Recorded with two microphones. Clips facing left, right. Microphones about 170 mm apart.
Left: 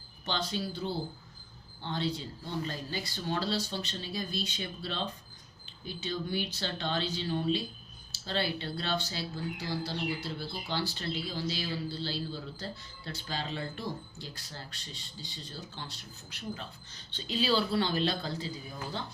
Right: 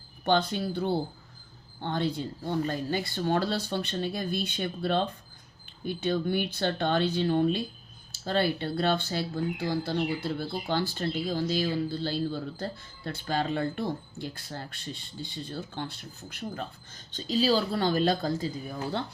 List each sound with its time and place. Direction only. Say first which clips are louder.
0.3 s speech: right 8 dB; 55° right (ahead or behind)